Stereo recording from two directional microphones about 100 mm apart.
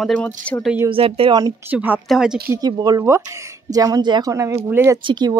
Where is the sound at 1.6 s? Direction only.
20° right (ahead or behind).